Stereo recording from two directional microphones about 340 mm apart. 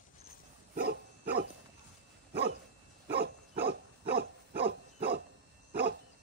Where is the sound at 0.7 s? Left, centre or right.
Right.